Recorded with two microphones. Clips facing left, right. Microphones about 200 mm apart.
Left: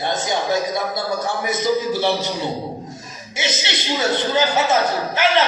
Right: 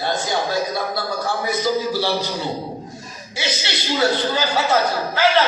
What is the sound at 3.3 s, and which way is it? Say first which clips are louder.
A man's voice: left 1 dB; 20° left (ahead or behind).